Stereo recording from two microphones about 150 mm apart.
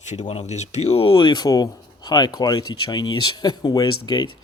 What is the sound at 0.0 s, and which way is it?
Speech, 50° left (ahead or behind).